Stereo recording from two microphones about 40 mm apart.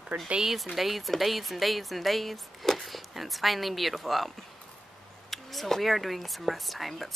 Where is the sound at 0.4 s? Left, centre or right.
Centre.